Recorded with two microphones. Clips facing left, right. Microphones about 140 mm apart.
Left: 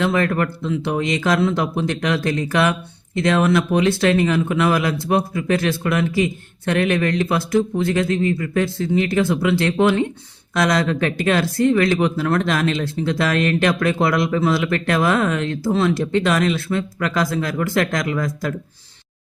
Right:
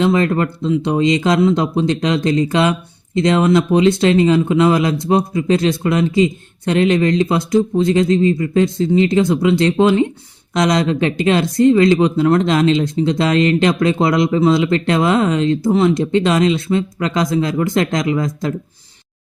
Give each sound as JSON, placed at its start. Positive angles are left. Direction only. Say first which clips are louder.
{"t": 0.0, "sound": "speech", "louder": "right 4 dB", "side_deg": -20}